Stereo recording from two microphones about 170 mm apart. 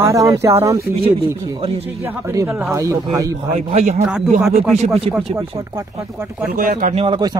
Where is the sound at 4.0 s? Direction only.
5° right (ahead or behind).